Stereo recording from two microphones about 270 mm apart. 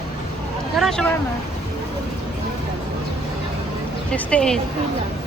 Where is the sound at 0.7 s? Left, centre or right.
Centre.